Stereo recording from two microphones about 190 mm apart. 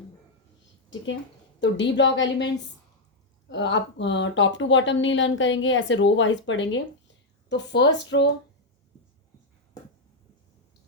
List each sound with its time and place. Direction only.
1.6 s speech: 70° left (ahead or behind)
3.5 s speech: 70° left (ahead or behind)
7.5 s speech: 65° left (ahead or behind)